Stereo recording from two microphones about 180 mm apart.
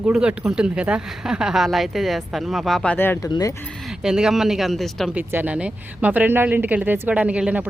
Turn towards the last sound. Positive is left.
turn(degrees=-5)  # may be behind; listen again after turning